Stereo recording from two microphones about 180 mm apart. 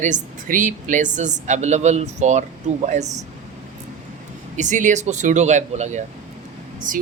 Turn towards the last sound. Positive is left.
turn(degrees=-45)  # may be behind; listen again after turning